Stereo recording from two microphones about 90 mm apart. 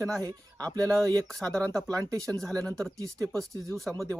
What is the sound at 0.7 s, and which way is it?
Speech, 40° right (ahead or behind).